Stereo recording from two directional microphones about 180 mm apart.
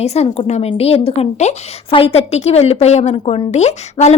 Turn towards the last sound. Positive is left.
turn(degrees=40)  # may be behind; listen again after turning